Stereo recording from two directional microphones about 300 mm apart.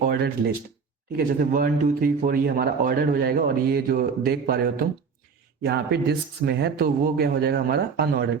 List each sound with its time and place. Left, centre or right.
0.1 s speech: right
5.6 s speech: right